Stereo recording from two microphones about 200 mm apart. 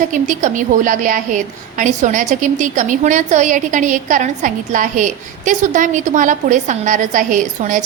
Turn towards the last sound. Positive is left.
turn(degrees=-40)  # may be behind; listen again after turning